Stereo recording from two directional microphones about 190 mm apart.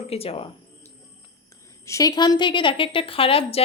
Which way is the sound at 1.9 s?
20° left (ahead or behind).